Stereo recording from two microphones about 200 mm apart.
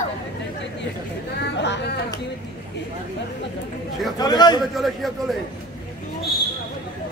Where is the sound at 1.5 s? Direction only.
60° left (ahead or behind).